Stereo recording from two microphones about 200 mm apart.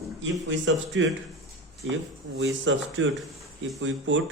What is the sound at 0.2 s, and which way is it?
A man's voice, 70° right (ahead or behind).